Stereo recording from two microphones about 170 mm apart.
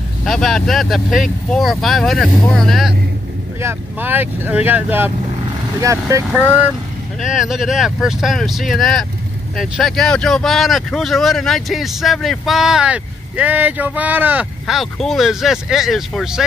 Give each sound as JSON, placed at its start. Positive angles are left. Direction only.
{"t": 0.2, "sound": "speech", "side_deg": 0}
{"t": 3.6, "sound": "speech", "side_deg": -10}
{"t": 7.2, "sound": "speech", "side_deg": -5}